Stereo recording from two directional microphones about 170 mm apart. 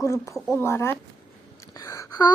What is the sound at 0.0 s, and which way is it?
A child's voice, 15° left (ahead or behind).